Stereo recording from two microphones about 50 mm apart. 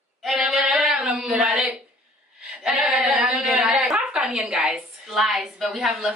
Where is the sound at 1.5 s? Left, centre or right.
Centre.